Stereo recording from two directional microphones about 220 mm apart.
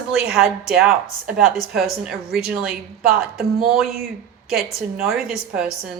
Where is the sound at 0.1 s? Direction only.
5° right (ahead or behind).